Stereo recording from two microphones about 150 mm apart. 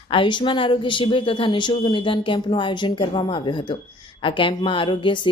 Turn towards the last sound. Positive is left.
turn(degrees=30)  # may be behind; listen again after turning